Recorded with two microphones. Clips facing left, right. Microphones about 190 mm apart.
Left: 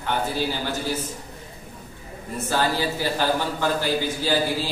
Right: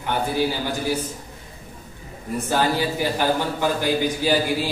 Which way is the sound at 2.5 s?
15° right (ahead or behind).